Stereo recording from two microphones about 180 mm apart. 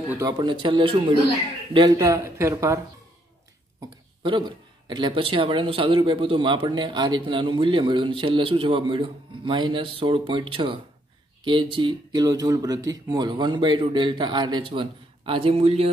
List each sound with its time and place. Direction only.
0.3 s speech: 25° right (ahead or behind)
4.2 s speech: 25° right (ahead or behind)